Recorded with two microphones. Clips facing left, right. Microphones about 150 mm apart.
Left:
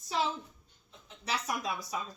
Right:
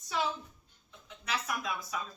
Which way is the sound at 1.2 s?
35° left (ahead or behind).